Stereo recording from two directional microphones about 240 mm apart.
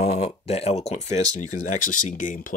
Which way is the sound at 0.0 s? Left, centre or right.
Left.